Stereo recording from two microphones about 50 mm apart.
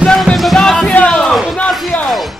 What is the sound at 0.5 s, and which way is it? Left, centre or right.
Music, centre.